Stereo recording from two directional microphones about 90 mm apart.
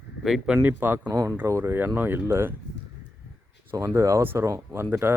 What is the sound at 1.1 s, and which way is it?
Speech, 40° right (ahead or behind).